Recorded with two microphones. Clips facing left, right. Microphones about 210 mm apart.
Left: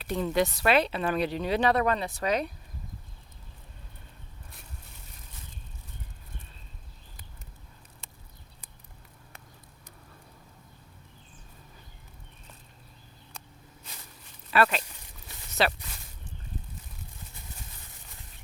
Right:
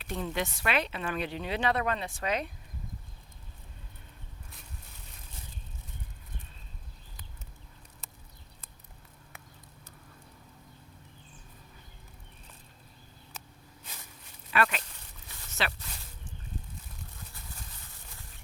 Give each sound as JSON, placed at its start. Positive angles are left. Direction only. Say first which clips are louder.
{"t": 0.0, "sound": "speech", "louder": "left 7 dB", "side_deg": 35}
{"t": 14.5, "sound": "speech", "louder": "left 4 dB", "side_deg": 35}